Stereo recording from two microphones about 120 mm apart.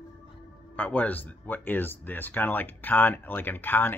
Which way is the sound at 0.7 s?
15° left (ahead or behind).